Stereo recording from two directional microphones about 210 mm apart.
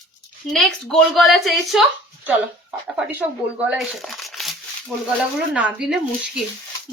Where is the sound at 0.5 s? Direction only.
Centre (ahead or behind).